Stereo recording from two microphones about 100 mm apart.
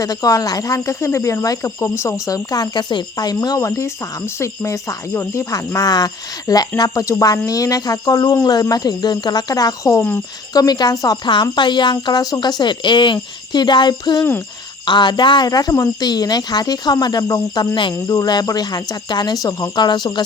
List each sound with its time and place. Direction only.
0.0 s speech: 40° left (ahead or behind)
11.5 s speech: 50° left (ahead or behind)